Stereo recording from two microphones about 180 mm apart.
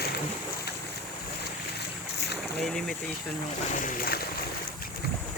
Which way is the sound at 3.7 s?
50° left (ahead or behind).